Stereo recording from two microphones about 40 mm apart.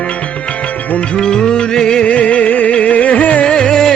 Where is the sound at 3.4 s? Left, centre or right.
Left.